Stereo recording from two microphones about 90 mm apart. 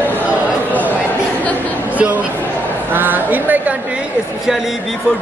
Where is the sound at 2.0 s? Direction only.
15° right (ahead or behind).